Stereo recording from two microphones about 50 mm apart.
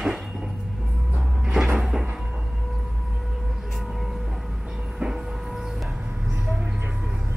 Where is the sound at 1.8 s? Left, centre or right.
Centre.